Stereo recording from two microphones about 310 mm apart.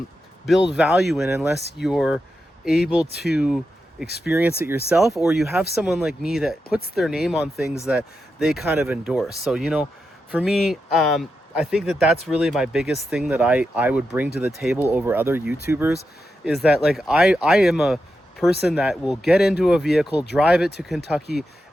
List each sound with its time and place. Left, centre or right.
0.8 s speech: centre
4.0 s speech: left
4.4 s speech: centre
6.7 s speech: left
6.9 s speech: centre
20.1 s speech: left
20.3 s speech: centre